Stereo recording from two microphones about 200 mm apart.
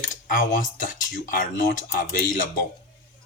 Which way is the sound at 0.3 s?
40° left (ahead or behind).